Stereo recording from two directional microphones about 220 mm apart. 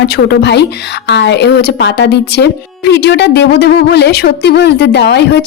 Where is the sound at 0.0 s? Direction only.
50° left (ahead or behind).